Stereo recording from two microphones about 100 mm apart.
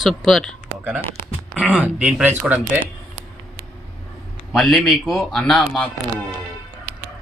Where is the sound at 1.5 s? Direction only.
10° right (ahead or behind).